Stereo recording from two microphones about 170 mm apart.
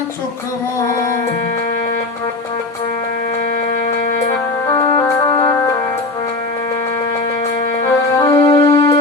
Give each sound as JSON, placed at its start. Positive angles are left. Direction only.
{"t": 4.7, "sound": "music", "side_deg": 20}
{"t": 7.9, "sound": "music", "side_deg": 20}